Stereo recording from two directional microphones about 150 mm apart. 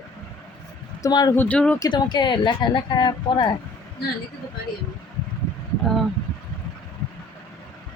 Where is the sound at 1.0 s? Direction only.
25° left (ahead or behind).